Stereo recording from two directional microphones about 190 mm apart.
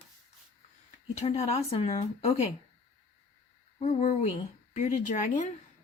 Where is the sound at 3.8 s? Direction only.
35° left (ahead or behind).